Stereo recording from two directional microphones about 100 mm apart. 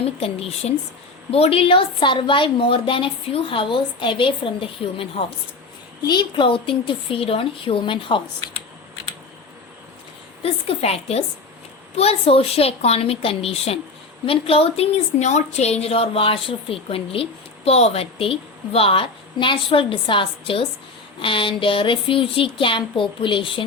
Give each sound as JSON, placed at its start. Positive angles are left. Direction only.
{"t": 0.0, "sound": "a woman's voice", "side_deg": 75}
{"t": 1.3, "sound": "a woman's voice", "side_deg": 70}
{"t": 6.0, "sound": "a woman's voice", "side_deg": 45}
{"t": 10.4, "sound": "a woman's voice", "side_deg": 80}
{"t": 14.3, "sound": "a woman's voice", "side_deg": 75}
{"t": 15.5, "sound": "a woman's voice", "side_deg": 90}
{"t": 17.7, "sound": "a woman's voice", "side_deg": 90}